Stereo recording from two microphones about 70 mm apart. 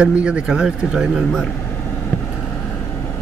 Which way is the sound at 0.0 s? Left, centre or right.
Centre.